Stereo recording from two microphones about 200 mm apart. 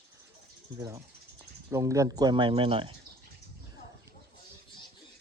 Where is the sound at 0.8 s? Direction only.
15° right (ahead or behind).